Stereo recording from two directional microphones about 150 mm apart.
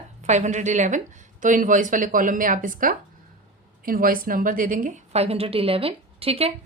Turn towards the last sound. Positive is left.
turn(degrees=-40)  # may be behind; listen again after turning